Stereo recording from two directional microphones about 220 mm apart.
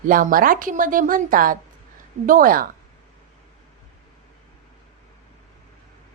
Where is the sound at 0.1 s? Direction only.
40° right (ahead or behind).